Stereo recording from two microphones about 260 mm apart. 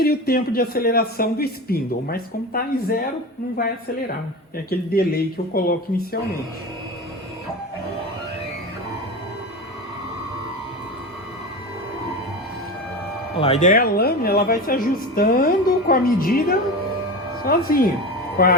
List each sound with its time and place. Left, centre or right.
0.0 s speech: left
4.5 s speech: left
13.3 s speech: left